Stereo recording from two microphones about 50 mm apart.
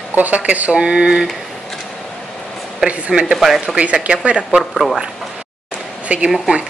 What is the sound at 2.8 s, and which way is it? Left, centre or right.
Speech, right.